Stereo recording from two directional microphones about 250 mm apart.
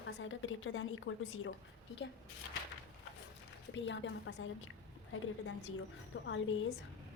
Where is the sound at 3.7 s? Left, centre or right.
Left.